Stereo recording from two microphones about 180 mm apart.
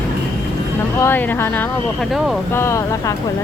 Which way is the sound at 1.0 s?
10° left (ahead or behind).